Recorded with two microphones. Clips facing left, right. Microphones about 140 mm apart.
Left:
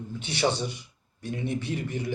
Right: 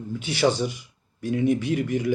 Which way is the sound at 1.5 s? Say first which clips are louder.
Right 8 dB; 55° right (ahead or behind).